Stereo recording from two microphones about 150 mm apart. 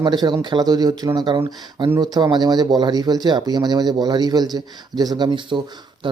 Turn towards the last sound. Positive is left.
turn(degrees=-35)  # may be behind; listen again after turning